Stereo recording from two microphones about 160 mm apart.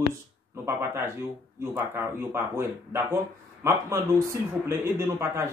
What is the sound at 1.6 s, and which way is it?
Speech, 10° right (ahead or behind).